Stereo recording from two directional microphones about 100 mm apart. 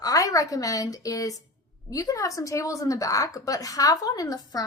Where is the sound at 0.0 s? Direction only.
35° left (ahead or behind).